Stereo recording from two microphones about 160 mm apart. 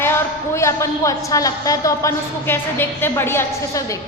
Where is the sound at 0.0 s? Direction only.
15° left (ahead or behind).